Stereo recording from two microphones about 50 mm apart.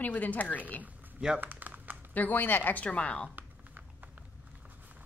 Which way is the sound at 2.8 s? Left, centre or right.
Left.